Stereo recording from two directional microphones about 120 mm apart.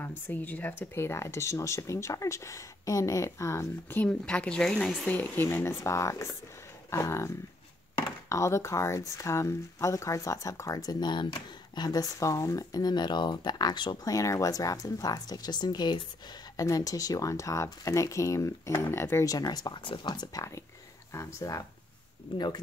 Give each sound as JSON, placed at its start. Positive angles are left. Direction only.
{"t": 0.3, "sound": "speech", "side_deg": 15}
{"t": 21.1, "sound": "speech", "side_deg": 25}